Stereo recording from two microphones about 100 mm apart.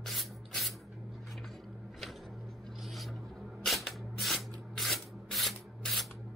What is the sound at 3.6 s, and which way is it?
Rub, centre (ahead or behind).